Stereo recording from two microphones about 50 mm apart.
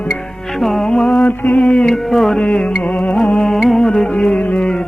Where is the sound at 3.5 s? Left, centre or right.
Centre; by 4.7 s left.